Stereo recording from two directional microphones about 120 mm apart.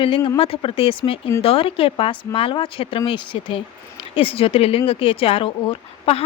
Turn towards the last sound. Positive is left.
turn(degrees=50)  # may be behind; listen again after turning